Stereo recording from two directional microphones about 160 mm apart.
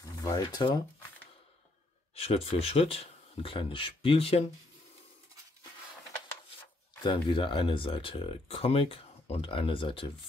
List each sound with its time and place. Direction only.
0.2 s speech: 25° left (ahead or behind)
2.1 s speech: 40° left (ahead or behind)
7.0 s speech: 30° left (ahead or behind)